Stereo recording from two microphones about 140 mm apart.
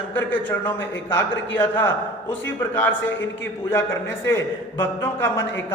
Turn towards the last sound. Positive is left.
turn(degrees=15)  # may be behind; listen again after turning